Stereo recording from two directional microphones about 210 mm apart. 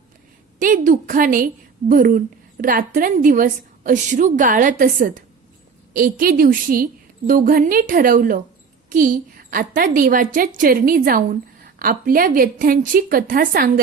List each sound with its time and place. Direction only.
0.6 s a woman's voice: 40° right (ahead or behind)